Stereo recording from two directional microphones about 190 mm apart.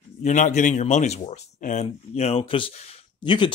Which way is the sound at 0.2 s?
40° left (ahead or behind).